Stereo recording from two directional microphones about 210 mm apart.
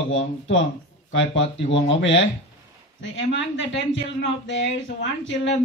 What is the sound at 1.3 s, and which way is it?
Speech, 60° left (ahead or behind).